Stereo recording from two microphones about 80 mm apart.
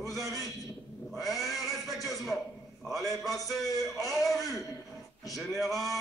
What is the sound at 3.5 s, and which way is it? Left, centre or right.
Speech, left.